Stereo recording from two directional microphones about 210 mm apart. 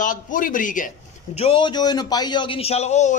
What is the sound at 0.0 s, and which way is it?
A man's voice, 40° left (ahead or behind).